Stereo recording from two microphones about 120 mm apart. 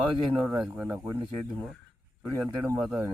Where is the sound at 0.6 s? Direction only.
10° right (ahead or behind).